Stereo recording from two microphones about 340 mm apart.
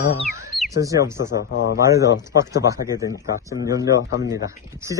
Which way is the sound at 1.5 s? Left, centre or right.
Left.